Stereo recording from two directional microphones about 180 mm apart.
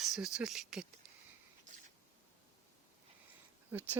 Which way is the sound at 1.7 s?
45° right (ahead or behind).